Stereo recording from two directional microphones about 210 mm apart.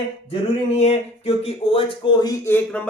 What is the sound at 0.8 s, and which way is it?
Speech, 30° left (ahead or behind).